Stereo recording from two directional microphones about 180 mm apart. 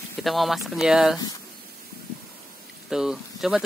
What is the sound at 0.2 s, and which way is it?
Speech, centre (ahead or behind).